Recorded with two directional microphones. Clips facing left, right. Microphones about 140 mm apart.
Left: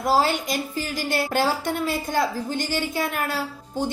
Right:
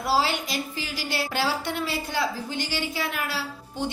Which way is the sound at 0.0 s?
45° left (ahead or behind).